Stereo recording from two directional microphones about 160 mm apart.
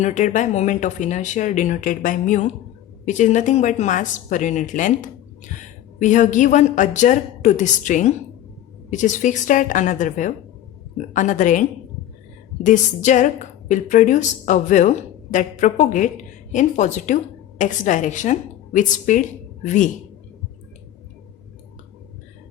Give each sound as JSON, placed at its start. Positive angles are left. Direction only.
{"t": 0.0, "sound": "speech", "side_deg": 50}
{"t": 12.6, "sound": "a woman's voice", "side_deg": 50}